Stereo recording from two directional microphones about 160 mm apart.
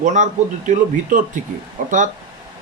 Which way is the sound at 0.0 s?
50° right (ahead or behind).